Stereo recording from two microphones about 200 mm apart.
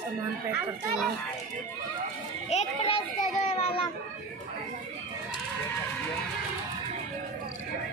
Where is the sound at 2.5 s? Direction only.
30° left (ahead or behind).